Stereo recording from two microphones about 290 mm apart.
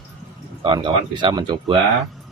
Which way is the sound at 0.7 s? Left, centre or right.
Centre.